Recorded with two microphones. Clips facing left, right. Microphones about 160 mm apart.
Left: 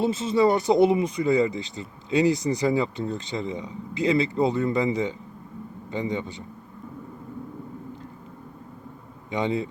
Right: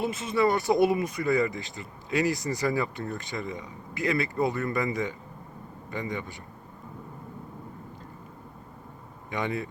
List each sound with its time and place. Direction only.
0.0 s speech: 30° left (ahead or behind)
9.3 s speech: 20° left (ahead or behind)